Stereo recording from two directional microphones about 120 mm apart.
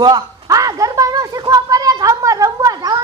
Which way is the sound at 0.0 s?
30° right (ahead or behind).